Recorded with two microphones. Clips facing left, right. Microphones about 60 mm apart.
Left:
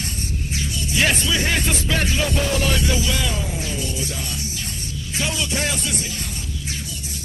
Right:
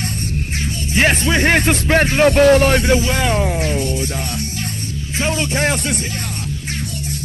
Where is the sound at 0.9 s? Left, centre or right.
Right.